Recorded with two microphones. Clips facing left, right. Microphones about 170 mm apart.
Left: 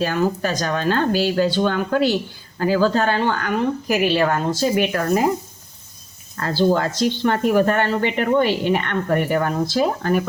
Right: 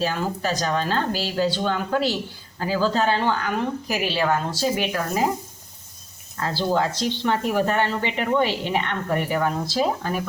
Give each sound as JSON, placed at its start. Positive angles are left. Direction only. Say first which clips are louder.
{"t": 0.0, "sound": "a woman's voice", "louder": "left 4 dB", "side_deg": 50}
{"t": 6.4, "sound": "speech", "louder": "left 4 dB", "side_deg": 50}